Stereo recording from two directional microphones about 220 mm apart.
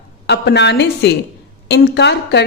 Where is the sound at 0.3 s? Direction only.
50° left (ahead or behind).